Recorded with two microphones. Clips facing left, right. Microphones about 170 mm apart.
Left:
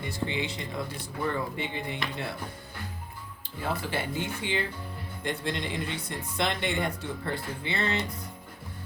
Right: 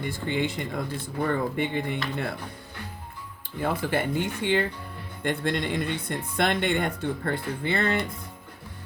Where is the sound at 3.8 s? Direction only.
55° right (ahead or behind).